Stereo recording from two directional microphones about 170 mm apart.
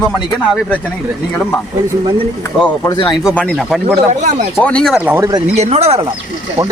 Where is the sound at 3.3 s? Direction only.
5° left (ahead or behind).